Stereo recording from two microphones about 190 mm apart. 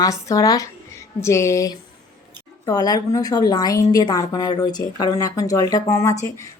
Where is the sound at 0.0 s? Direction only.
15° left (ahead or behind).